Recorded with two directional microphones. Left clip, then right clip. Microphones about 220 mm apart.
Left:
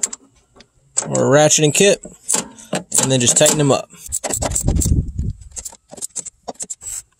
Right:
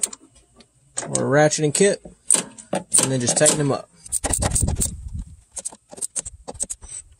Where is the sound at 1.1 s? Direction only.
40° left (ahead or behind).